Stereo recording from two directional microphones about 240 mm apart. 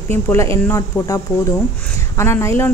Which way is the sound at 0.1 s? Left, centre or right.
Centre.